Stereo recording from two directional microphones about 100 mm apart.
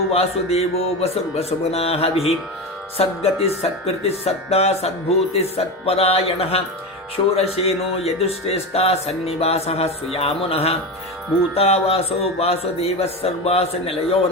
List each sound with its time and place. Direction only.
0.1 s a man's voice: 90° left